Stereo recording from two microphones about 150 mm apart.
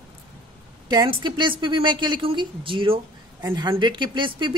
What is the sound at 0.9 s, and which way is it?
A woman's voice, 30° right (ahead or behind).